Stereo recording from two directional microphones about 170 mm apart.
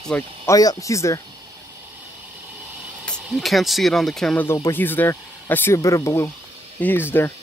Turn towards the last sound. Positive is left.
turn(degrees=10)  # may be behind; listen again after turning